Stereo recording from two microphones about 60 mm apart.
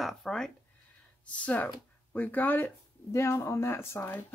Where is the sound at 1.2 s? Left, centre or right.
Left.